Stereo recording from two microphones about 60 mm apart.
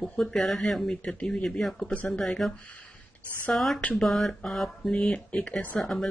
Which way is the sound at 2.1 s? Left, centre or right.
Centre.